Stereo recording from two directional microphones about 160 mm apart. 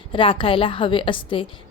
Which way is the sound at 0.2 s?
35° left (ahead or behind).